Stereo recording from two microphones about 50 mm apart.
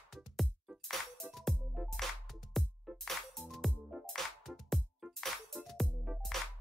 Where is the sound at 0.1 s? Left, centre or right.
Centre.